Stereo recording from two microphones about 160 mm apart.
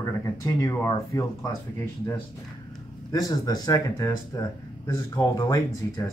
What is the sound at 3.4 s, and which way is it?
Speech, 25° left (ahead or behind).